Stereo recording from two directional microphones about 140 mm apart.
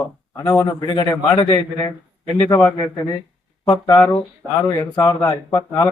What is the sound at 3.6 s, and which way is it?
Speech, 25° left (ahead or behind).